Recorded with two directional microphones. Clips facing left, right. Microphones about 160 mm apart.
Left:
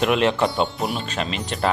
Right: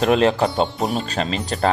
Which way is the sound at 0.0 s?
35° right (ahead or behind).